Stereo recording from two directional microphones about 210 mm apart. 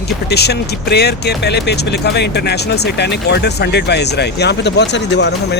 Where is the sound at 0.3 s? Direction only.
50° left (ahead or behind).